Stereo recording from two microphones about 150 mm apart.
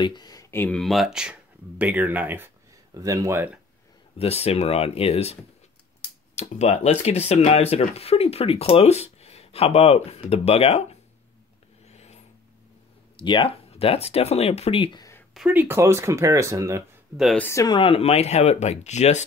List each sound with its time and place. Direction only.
0.0 s speech: 30° left (ahead or behind); by 3.5 s 15° right (ahead or behind)
4.2 s speech: 45° left (ahead or behind)
11.9 s vehicle: 45° left (ahead or behind)
13.1 s speech: 35° left (ahead or behind)
15.5 s speech: 15° right (ahead or behind)
17.4 s speech: 20° left (ahead or behind)
17.7 s speech: 40° left (ahead or behind)